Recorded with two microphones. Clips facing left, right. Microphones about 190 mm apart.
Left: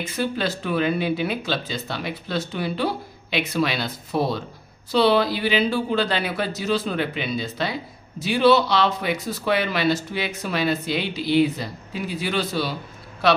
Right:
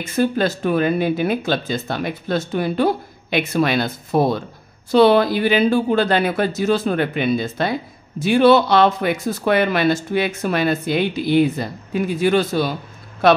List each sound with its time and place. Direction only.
0.0 s speech: 50° right (ahead or behind)